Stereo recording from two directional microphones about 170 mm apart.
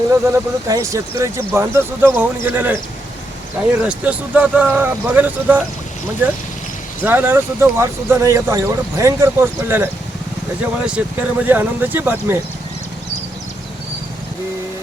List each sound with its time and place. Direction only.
0.1 s speech: 15° right (ahead or behind)
7.0 s speech: 10° right (ahead or behind)